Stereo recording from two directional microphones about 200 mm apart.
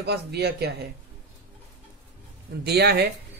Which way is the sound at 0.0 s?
55° right (ahead or behind).